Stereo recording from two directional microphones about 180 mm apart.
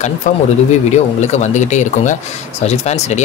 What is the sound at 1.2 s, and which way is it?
Speech, 40° left (ahead or behind).